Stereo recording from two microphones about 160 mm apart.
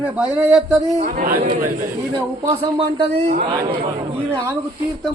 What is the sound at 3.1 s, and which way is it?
Speech, 45° right (ahead or behind).